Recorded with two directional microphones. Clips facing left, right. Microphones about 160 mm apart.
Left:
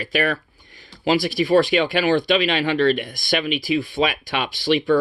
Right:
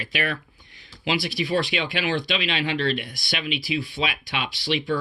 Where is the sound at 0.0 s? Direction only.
45° left (ahead or behind).